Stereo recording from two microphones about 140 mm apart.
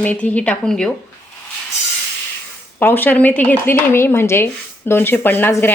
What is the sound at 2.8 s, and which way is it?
Speech, 15° left (ahead or behind).